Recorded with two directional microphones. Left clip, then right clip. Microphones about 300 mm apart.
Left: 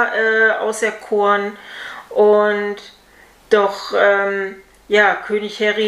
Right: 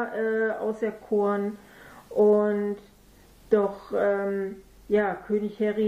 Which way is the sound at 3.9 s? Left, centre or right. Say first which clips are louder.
Left 11 dB; centre.